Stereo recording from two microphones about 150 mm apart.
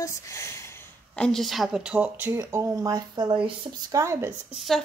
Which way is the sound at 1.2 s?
Centre (ahead or behind).